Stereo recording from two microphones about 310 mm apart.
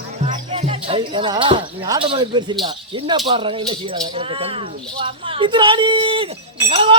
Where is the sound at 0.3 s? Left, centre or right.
Centre.